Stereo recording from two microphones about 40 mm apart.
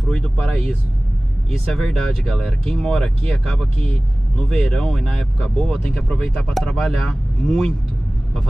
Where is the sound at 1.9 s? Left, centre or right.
Centre.